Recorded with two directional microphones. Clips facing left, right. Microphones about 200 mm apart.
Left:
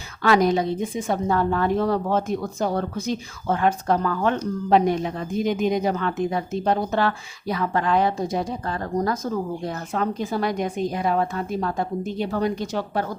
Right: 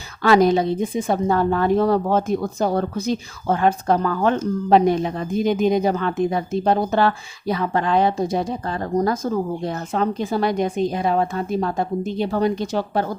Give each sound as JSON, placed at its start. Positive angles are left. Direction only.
{"t": 0.2, "sound": "a woman's voice", "side_deg": -30}